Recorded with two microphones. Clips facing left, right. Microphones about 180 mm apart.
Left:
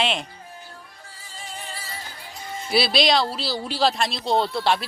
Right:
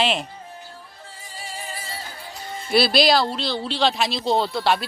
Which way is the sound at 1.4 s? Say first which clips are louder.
Right 2 dB; 5° right (ahead or behind).